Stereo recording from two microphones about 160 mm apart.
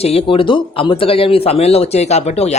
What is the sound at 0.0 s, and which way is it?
Speech, 40° left (ahead or behind).